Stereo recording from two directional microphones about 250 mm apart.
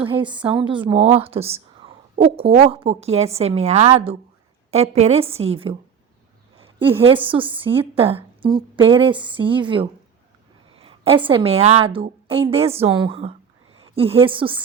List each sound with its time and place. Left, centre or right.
0.0 s a woman's voice: centre
6.7 s a woman's voice: centre
10.8 s a sound: right
11.3 s a woman's voice: right